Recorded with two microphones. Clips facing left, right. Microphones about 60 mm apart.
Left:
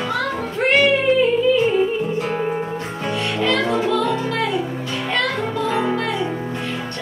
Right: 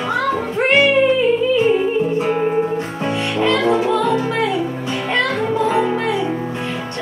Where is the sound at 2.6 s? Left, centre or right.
Centre.